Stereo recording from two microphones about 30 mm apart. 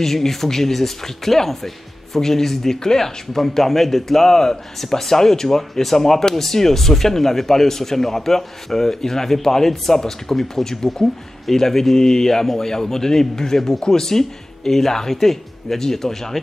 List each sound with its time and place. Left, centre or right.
0.0 s speech: centre